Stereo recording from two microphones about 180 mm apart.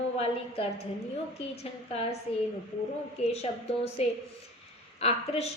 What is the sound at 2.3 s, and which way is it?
A woman's voice, 35° left (ahead or behind).